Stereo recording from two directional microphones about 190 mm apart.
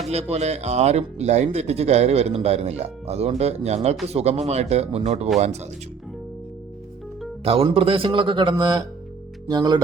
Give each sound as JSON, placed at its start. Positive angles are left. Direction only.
{"t": 0.1, "sound": "speech", "side_deg": -35}
{"t": 7.4, "sound": "a man's voice", "side_deg": -30}